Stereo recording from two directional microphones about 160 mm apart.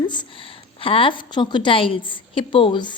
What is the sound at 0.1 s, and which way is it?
A woman's voice, 30° left (ahead or behind).